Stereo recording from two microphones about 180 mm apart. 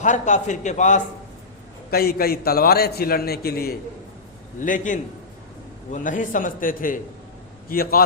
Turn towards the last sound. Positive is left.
turn(degrees=55)  # may be behind; listen again after turning